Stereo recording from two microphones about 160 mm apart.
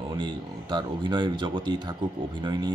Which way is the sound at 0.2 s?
30° right (ahead or behind).